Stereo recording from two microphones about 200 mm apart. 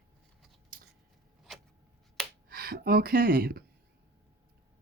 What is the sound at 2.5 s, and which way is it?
Speech, 50° right (ahead or behind).